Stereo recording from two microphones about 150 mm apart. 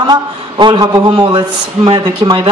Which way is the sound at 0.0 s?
30° right (ahead or behind).